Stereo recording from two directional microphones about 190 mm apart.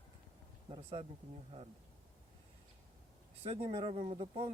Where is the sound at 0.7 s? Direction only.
30° right (ahead or behind).